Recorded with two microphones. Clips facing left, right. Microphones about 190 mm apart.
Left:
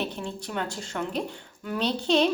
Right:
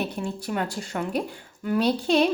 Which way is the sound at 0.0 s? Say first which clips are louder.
Right 3 dB; 10° right (ahead or behind).